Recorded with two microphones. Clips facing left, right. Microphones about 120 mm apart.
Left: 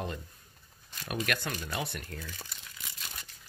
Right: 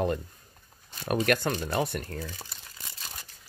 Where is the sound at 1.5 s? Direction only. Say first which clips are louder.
Right 7 dB; 30° right (ahead or behind).